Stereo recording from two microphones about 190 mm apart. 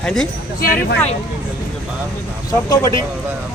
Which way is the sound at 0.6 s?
50° left (ahead or behind).